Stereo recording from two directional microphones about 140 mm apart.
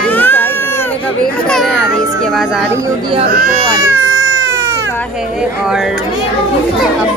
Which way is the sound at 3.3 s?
90° right.